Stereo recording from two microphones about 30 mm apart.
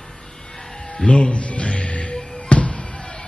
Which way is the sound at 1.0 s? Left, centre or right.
Left.